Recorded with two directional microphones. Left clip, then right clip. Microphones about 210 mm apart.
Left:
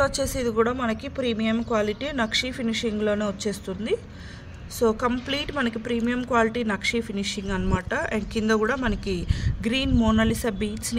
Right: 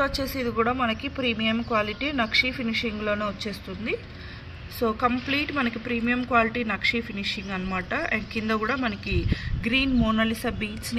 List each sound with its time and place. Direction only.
0.0 s a woman's voice: 55° left (ahead or behind)